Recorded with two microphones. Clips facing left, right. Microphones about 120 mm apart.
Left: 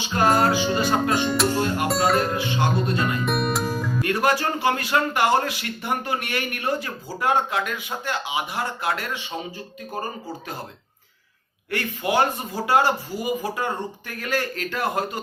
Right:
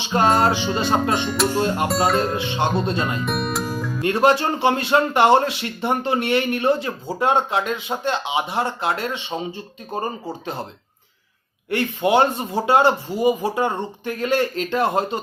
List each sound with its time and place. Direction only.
0.0 s music: 25° right (ahead or behind)
1.2 s music: centre (ahead or behind)
1.5 s speech: 20° right (ahead or behind)
3.2 s music: centre (ahead or behind)
4.0 s speech: 25° right (ahead or behind)
11.7 s speech: 25° right (ahead or behind)